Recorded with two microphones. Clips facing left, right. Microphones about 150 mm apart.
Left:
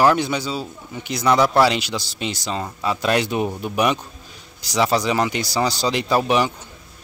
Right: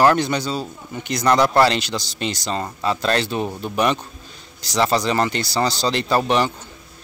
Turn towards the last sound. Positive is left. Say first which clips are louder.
# even
turn(degrees=10)  # may be behind; listen again after turning